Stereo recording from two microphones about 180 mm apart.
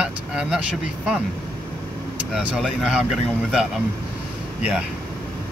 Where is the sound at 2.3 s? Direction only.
Centre (ahead or behind).